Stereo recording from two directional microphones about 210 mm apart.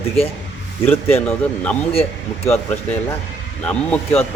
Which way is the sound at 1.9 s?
30° left (ahead or behind).